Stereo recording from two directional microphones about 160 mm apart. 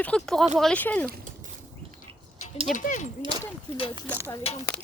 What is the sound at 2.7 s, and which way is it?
Speech, 50° left (ahead or behind).